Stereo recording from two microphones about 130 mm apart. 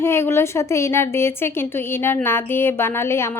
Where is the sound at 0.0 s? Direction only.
20° left (ahead or behind).